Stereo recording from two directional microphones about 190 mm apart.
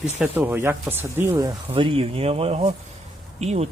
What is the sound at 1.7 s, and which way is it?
Speech, 30° right (ahead or behind).